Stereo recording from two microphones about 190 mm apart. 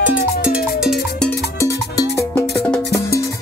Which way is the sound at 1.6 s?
15° left (ahead or behind).